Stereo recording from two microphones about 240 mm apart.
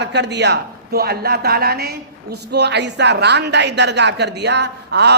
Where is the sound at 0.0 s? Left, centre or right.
Right.